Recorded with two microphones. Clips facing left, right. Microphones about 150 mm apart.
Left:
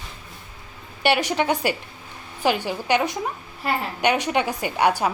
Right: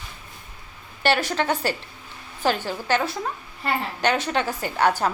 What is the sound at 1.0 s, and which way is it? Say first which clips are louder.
A woman's voice: left 1 dB; 15° left (ahead or behind).